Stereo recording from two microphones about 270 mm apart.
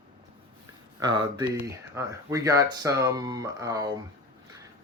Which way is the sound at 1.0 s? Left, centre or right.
Centre.